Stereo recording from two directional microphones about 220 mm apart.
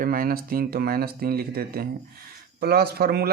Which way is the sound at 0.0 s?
40° right (ahead or behind).